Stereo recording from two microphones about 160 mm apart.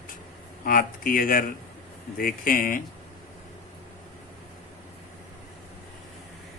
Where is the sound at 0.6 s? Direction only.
60° left (ahead or behind).